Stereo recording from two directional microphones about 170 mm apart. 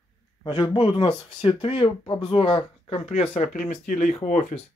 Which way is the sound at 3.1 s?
45° left (ahead or behind).